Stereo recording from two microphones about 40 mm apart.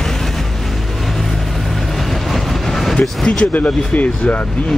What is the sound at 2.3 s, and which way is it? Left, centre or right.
Vehicle, centre.